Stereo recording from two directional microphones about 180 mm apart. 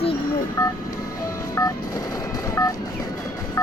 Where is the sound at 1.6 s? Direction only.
15° left (ahead or behind).